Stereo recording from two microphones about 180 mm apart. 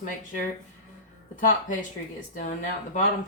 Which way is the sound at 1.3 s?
50° left (ahead or behind).